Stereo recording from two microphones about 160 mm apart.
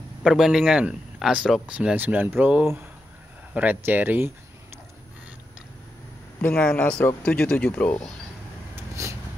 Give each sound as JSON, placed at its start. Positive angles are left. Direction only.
{"t": 0.2, "sound": "speech", "side_deg": 0}
{"t": 6.4, "sound": "speech", "side_deg": 10}
{"t": 9.0, "sound": "a sound", "side_deg": -20}